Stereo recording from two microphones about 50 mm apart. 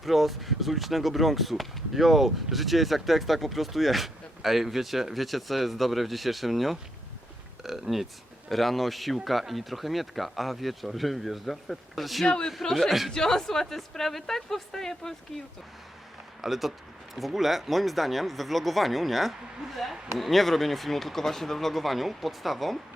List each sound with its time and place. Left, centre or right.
0.0 s speech: centre
12.2 s a woman's voice: centre
12.7 s speech: centre
13.1 s a woman's voice: centre
16.4 s speech: centre